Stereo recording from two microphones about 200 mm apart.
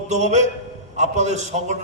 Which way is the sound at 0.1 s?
35° right (ahead or behind).